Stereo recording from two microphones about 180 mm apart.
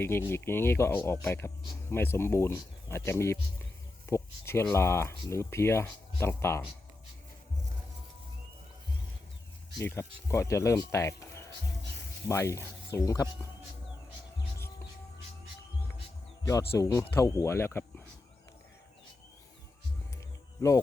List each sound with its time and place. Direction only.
0.0 s speech: 15° left (ahead or behind)
9.8 s speech: 15° left (ahead or behind)
16.7 s speech: 15° left (ahead or behind)
20.6 s speech: 15° left (ahead or behind)